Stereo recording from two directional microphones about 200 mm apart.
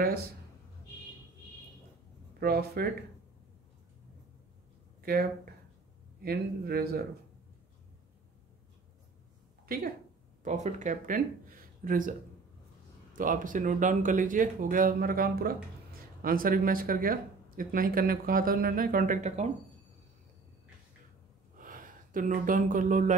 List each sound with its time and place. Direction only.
2.4 s speech: 50° right (ahead or behind)
5.0 s speech: 50° right (ahead or behind)
10.4 s speech: 35° right (ahead or behind)
21.5 s speech: 45° right (ahead or behind)